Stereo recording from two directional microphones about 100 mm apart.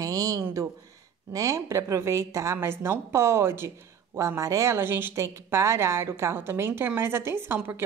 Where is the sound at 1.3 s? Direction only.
35° right (ahead or behind).